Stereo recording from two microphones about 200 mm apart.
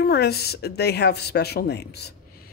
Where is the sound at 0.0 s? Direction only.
50° left (ahead or behind).